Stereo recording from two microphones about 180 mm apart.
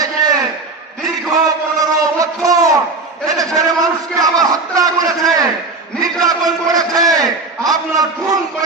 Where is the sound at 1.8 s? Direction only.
20° right (ahead or behind).